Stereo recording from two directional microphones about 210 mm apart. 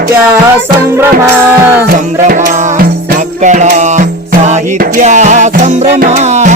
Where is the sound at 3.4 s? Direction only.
35° right (ahead or behind).